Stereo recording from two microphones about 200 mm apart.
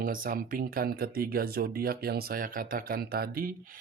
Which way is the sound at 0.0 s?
45° right (ahead or behind).